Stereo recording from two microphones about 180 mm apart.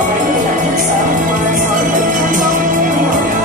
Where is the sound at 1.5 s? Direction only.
45° right (ahead or behind).